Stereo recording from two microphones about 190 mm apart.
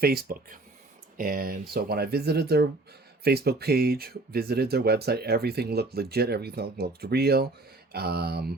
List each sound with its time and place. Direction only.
0.0 s speech: 50° right (ahead or behind)